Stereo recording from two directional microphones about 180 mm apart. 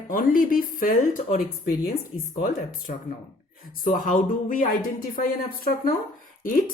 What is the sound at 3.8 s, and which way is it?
Speech, 45° left (ahead or behind).